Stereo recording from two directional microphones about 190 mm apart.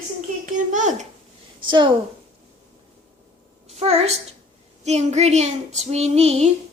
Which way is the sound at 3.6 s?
35° right (ahead or behind).